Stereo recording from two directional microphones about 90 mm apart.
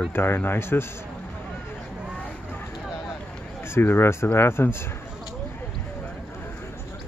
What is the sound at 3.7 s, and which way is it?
Speech, 25° left (ahead or behind).